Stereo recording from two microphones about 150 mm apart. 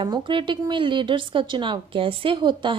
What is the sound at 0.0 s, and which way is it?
Speech, 30° right (ahead or behind).